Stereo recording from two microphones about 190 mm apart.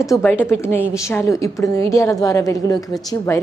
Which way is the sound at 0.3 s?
10° left (ahead or behind).